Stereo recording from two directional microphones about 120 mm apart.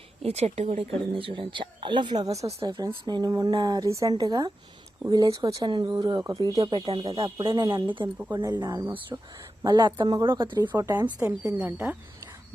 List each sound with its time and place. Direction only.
0.3 s speech: 60° right (ahead or behind)
0.8 s speech: 45° right (ahead or behind)
6.7 s speech: 50° right (ahead or behind)
7.0 s speech: 25° right (ahead or behind)
9.6 s speech: 40° right (ahead or behind)
10.7 s speech: 20° right (ahead or behind)